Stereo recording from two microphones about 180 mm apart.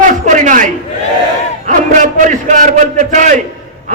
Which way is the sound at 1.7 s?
45° right (ahead or behind).